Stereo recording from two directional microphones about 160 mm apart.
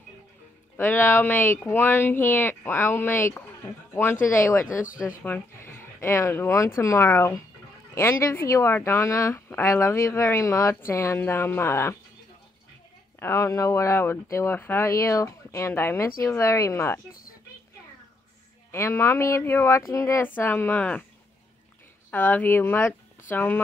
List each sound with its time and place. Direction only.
0.7 s speech: 15° left (ahead or behind)
13.2 s speech: 20° left (ahead or behind)
17.1 s a sound: 65° left (ahead or behind)
18.7 s speech: 15° left (ahead or behind)
22.1 s speech: 10° left (ahead or behind)